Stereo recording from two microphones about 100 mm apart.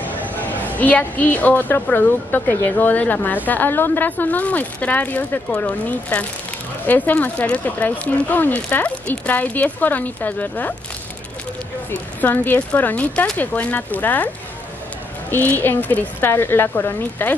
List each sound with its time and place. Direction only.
0.0 s a woman's voice: 20° left (ahead or behind)
12.2 s speech: 15° left (ahead or behind)
15.3 s speech: 20° left (ahead or behind)